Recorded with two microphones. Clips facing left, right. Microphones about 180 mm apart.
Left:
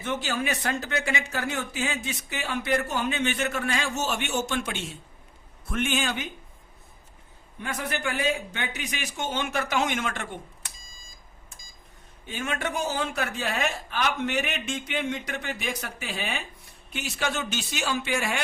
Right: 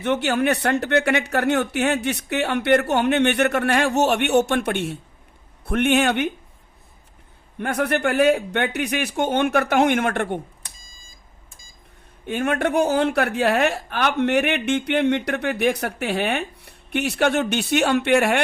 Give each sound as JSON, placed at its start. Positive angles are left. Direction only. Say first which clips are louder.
{"t": 0.0, "sound": "a woman's voice", "louder": "right 9 dB", "side_deg": -65}
{"t": 7.6, "sound": "a woman's voice", "louder": "right 9 dB", "side_deg": -60}
{"t": 12.2, "sound": "a woman's voice", "louder": "right 9 dB", "side_deg": -60}